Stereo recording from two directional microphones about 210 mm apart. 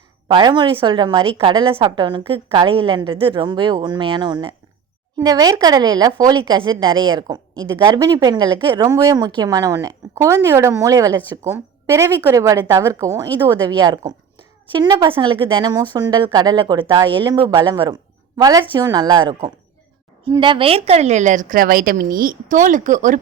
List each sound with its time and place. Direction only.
0.3 s a woman's voice: 20° right (ahead or behind); by 23.1 s 35° right (ahead or behind)